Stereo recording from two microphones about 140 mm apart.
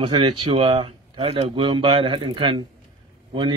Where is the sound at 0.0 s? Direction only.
40° right (ahead or behind).